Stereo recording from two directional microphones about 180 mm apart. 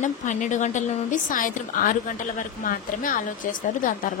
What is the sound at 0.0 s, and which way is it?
A woman's voice, 45° left (ahead or behind).